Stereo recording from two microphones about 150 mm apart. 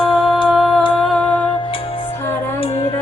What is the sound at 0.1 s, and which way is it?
Humming, centre (ahead or behind).